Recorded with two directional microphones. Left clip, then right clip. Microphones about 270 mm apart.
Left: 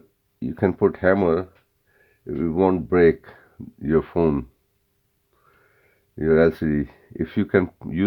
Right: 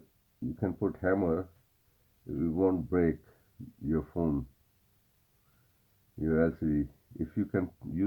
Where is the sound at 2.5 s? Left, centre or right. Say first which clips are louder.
Left 10 dB; left.